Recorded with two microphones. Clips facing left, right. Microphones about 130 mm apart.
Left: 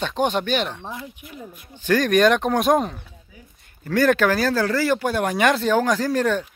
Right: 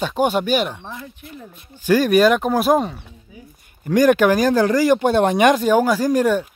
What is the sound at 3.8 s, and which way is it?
Speech, 15° right (ahead or behind).